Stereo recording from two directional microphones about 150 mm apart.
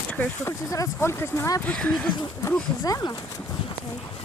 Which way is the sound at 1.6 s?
10° left (ahead or behind).